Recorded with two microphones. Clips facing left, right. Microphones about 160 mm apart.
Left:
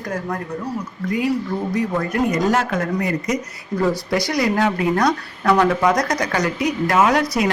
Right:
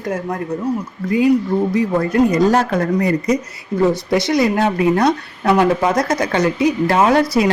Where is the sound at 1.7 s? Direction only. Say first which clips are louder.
Right 5 dB; 30° right (ahead or behind).